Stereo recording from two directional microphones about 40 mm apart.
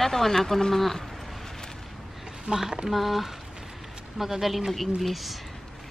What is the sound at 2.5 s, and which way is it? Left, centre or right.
Speech, centre.